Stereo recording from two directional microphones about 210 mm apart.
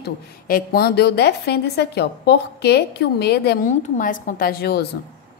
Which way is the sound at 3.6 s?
40° left (ahead or behind).